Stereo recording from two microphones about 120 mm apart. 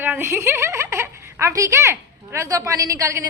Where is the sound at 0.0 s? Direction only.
15° right (ahead or behind).